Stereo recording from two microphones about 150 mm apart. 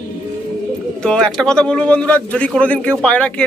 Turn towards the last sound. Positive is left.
turn(degrees=10)  # may be behind; listen again after turning